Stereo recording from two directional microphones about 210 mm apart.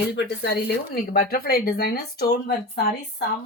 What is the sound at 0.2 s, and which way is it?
Speech, 50° left (ahead or behind).